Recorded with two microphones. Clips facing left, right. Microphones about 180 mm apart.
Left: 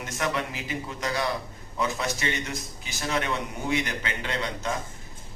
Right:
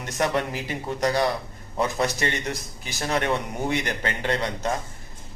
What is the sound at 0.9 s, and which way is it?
A man's voice, 40° right (ahead or behind).